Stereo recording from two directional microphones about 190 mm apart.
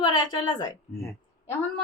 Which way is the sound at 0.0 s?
25° left (ahead or behind).